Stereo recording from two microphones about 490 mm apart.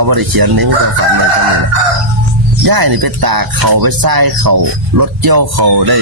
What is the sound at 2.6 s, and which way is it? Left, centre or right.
Speech, right.